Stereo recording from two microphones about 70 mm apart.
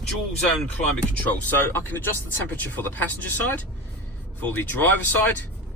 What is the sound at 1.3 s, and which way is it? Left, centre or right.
Speech, left.